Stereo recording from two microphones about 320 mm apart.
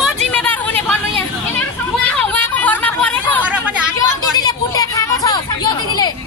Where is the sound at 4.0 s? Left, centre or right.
Centre.